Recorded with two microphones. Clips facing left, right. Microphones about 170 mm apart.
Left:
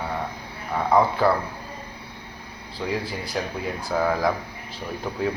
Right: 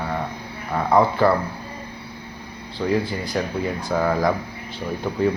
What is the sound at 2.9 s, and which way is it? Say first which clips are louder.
Speech: right 6 dB; centre (ahead or behind).